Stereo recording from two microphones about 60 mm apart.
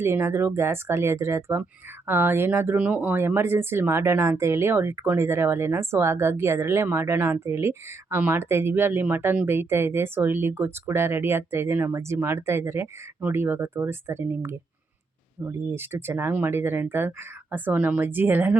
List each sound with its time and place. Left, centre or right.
0.0 s speech: right
2.0 s speech: right
2.7 s speech: right
17.7 s speech: right